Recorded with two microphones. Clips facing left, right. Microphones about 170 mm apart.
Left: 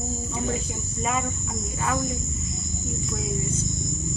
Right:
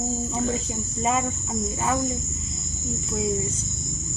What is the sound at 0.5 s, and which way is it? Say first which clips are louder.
Cricket: right 2 dB; 25° right (ahead or behind).